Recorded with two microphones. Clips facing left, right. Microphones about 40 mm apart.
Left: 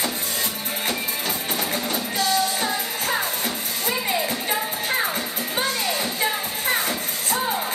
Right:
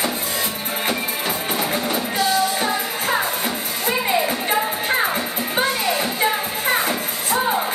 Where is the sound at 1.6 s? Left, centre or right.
Centre.